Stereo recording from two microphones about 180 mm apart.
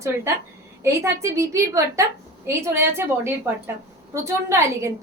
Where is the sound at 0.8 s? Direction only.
15° right (ahead or behind).